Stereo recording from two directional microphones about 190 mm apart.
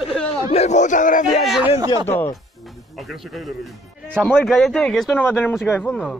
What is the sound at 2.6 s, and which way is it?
Speech, centre (ahead or behind).